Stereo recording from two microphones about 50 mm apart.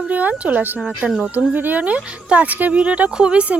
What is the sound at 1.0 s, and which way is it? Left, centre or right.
Speech, centre.